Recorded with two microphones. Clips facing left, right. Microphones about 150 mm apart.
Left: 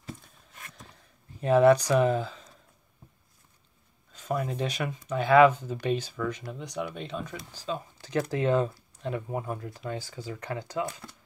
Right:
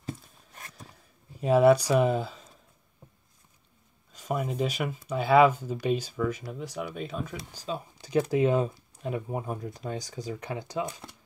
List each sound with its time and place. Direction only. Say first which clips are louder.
1.4 s speech: even; 10° right (ahead or behind)
4.1 s a sound: even; 15° right (ahead or behind)
4.5 s speech: right 2 dB; 5° right (ahead or behind)